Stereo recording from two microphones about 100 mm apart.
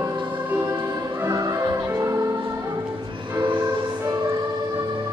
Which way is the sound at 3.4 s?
50° right (ahead or behind).